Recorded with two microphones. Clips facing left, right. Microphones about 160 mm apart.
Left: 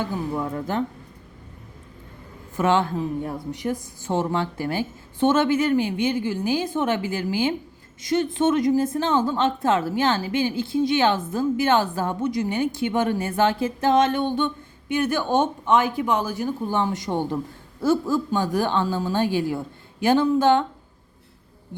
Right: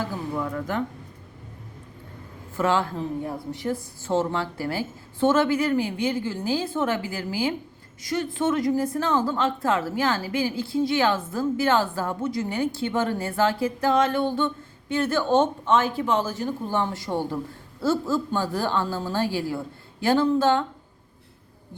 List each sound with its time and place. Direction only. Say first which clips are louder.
0.3 s a woman's voice: right 1 dB; 25° left (ahead or behind)
2.6 s a woman's voice: left 3 dB; 20° left (ahead or behind)